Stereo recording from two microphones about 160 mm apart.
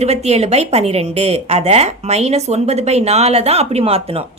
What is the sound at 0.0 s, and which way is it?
A woman's voice, 40° right (ahead or behind).